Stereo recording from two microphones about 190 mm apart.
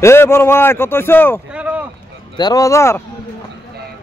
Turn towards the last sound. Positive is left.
turn(degrees=15)  # may be behind; listen again after turning